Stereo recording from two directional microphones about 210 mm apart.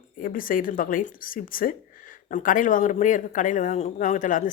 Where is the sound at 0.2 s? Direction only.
40° left (ahead or behind).